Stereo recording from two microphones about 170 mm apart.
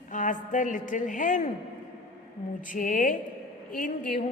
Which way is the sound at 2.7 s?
50° left (ahead or behind).